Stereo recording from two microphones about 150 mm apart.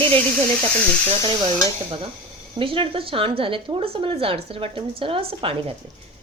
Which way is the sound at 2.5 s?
35° right (ahead or behind).